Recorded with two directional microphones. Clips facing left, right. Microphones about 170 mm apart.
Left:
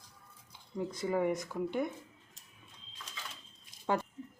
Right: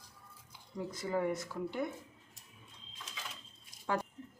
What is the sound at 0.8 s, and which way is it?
Speech, 20° left (ahead or behind).